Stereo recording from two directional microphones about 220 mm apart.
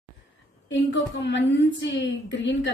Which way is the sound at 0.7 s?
55° left (ahead or behind).